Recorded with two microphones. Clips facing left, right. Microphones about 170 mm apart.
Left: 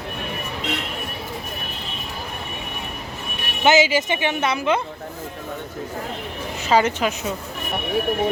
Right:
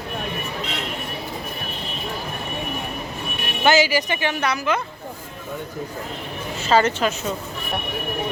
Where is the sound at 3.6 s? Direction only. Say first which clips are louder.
Left 1 dB; 20° left (ahead or behind).